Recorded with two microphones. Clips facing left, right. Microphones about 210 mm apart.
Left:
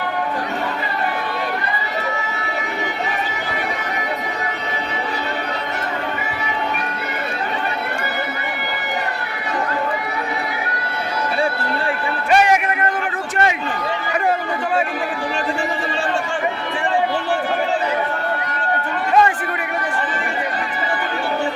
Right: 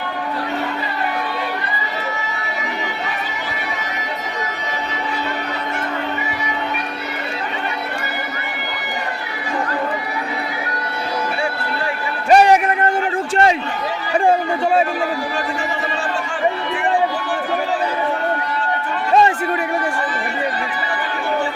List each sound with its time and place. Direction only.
12.3 s music: 35° right (ahead or behind)